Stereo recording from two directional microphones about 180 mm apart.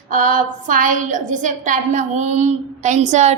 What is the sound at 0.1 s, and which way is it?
A woman's voice, 45° right (ahead or behind).